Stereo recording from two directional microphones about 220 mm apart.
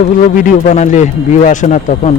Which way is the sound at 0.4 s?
35° left (ahead or behind).